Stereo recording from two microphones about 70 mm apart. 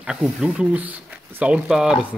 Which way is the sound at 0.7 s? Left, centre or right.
Right.